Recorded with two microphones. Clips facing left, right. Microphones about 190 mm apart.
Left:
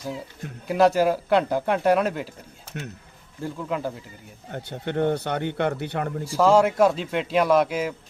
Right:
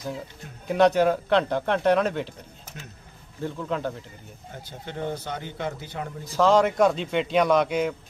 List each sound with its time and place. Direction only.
0.7 s speech: 5° left (ahead or behind)
3.4 s speech: 5° left (ahead or behind)
4.5 s speech: 65° left (ahead or behind)
6.2 s a man's voice: 10° left (ahead or behind)